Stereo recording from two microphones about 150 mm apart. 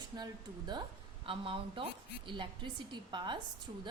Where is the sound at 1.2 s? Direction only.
35° right (ahead or behind).